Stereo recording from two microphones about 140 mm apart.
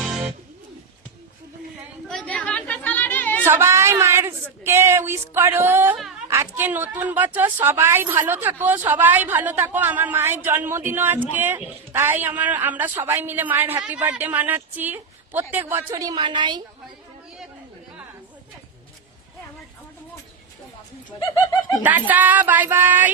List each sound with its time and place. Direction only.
0.0 s music: centre (ahead or behind)
2.0 s chatter: 5° left (ahead or behind)
3.4 s a sound: 20° right (ahead or behind)
4.6 s a woman's voice: 20° right (ahead or behind)
15.9 s a woman's voice: 30° right (ahead or behind)
21.8 s a woman's voice: 10° right (ahead or behind)